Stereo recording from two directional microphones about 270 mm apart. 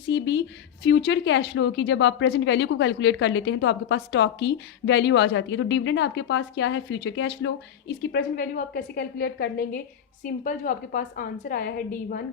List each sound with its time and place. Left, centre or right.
0.1 s speech: left